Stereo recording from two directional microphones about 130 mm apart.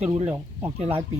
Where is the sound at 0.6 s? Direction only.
50° right (ahead or behind).